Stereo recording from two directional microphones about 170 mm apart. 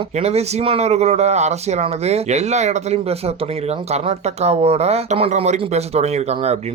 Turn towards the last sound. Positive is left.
turn(degrees=-40)  # may be behind; listen again after turning